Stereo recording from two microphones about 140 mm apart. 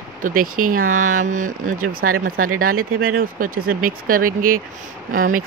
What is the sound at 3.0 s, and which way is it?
Speech, 90° right.